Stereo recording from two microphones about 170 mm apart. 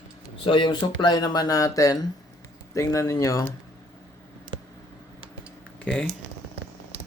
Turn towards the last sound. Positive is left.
turn(degrees=5)  # may be behind; listen again after turning